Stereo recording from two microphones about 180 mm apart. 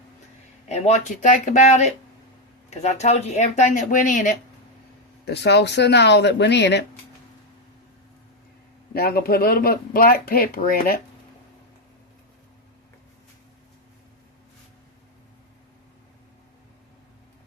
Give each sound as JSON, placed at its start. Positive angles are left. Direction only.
{"t": 0.7, "sound": "speech", "side_deg": 40}
{"t": 5.2, "sound": "speech", "side_deg": 70}
{"t": 8.9, "sound": "speech", "side_deg": 60}